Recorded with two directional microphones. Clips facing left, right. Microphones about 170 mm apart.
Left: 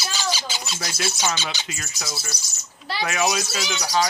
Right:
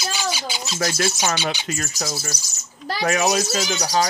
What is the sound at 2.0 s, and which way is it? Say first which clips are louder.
A child's voice: right 5 dB; 45° right (ahead or behind).